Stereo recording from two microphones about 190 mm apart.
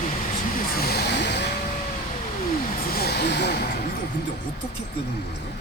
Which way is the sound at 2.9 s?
55° left (ahead or behind).